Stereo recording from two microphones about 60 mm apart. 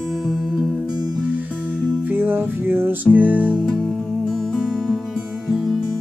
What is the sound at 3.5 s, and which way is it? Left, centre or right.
Music, centre.